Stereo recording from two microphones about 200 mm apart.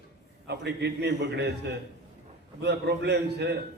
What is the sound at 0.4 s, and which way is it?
A man's voice, 55° right (ahead or behind).